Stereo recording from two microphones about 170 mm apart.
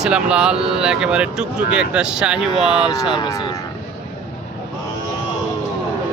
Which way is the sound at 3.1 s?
20° left (ahead or behind).